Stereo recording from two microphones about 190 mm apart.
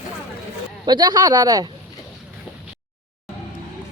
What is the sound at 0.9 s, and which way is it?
Speech, 20° right (ahead or behind).